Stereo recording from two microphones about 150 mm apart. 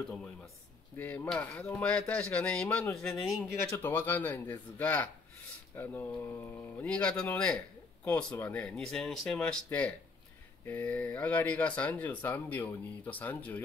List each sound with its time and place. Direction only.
0.9 s a man's voice: 10° left (ahead or behind)
3.7 s speech: 15° left (ahead or behind)